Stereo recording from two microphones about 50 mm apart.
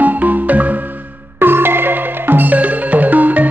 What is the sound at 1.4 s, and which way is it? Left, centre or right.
Music, right.